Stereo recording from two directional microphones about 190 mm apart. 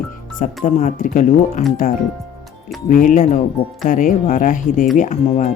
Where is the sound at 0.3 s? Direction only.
40° left (ahead or behind).